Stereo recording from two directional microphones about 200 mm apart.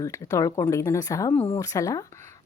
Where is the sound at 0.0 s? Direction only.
15° left (ahead or behind).